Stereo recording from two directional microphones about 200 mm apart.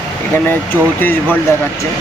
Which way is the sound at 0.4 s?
10° left (ahead or behind).